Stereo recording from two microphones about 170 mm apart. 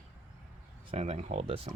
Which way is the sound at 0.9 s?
40° right (ahead or behind).